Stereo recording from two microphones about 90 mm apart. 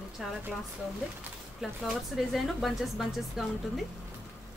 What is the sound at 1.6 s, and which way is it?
Speech, 5° right (ahead or behind).